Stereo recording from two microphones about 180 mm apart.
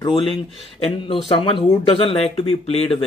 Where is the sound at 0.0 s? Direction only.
30° left (ahead or behind).